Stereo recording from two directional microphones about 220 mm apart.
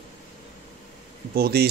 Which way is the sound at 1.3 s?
45° right (ahead or behind).